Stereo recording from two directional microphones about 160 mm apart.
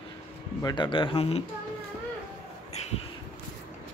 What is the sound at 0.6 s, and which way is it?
Speech, 25° left (ahead or behind).